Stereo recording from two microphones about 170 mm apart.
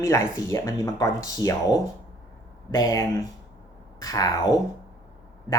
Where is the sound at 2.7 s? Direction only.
20° left (ahead or behind).